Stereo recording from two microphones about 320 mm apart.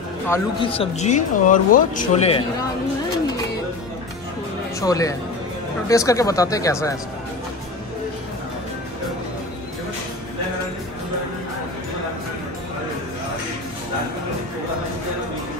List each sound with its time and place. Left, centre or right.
0.3 s speech: centre
4.7 s speech: centre